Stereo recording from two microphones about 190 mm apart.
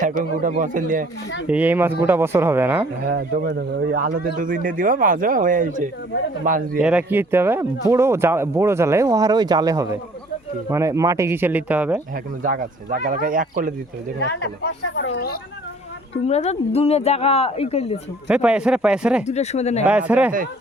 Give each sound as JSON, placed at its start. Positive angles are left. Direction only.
{"t": 0.0, "sound": "speech", "side_deg": -45}
{"t": 1.5, "sound": "speech", "side_deg": -10}
{"t": 3.0, "sound": "speech", "side_deg": -50}
{"t": 6.7, "sound": "speech", "side_deg": -5}
{"t": 12.1, "sound": "speech", "side_deg": -45}
{"t": 14.3, "sound": "speech", "side_deg": 65}
{"t": 16.2, "sound": "speech", "side_deg": 35}
{"t": 18.3, "sound": "speech", "side_deg": -5}
{"t": 19.2, "sound": "speech", "side_deg": 35}
{"t": 19.8, "sound": "speech", "side_deg": -5}